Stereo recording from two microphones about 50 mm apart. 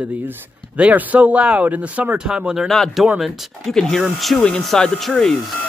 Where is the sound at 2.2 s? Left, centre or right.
Centre.